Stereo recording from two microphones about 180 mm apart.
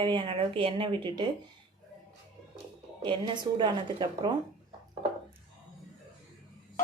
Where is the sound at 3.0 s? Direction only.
25° right (ahead or behind).